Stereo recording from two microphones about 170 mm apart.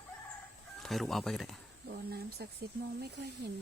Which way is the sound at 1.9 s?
70° right (ahead or behind).